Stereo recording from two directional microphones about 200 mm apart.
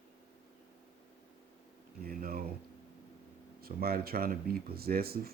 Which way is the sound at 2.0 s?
45° right (ahead or behind).